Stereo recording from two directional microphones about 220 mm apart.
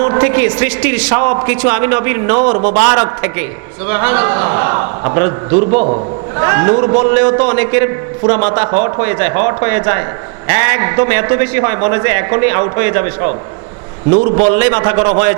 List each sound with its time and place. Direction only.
0.0 s a man's voice: 20° right (ahead or behind)
1.1 s a man's voice: 25° right (ahead or behind)
2.7 s a man's voice: 15° right (ahead or behind); by 6.0 s 30° right (ahead or behind)
6.4 s a man's voice: 20° right (ahead or behind)
14.1 s a man's voice: 30° right (ahead or behind)
14.5 s a man's voice: 15° right (ahead or behind)